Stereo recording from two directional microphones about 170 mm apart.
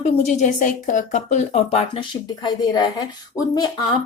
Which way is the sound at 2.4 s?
25° left (ahead or behind).